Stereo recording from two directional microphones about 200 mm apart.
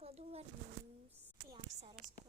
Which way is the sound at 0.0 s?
30° right (ahead or behind).